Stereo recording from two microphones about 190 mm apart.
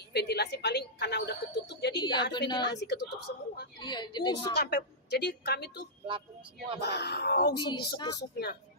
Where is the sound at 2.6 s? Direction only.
60° left (ahead or behind).